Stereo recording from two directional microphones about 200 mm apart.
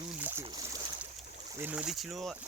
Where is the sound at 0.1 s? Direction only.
10° right (ahead or behind).